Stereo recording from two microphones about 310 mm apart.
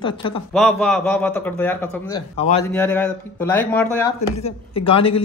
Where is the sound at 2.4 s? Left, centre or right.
Centre.